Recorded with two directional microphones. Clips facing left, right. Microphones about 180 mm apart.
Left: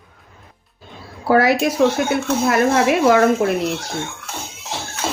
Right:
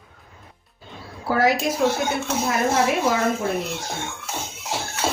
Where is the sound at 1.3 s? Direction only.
70° left (ahead or behind).